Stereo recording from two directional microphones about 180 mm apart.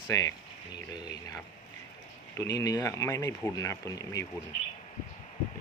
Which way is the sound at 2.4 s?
20° left (ahead or behind).